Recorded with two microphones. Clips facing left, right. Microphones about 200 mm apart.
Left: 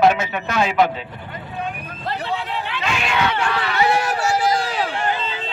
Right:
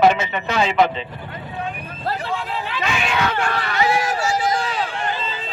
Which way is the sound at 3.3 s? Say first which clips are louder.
Left 1 dB; 45° right (ahead or behind).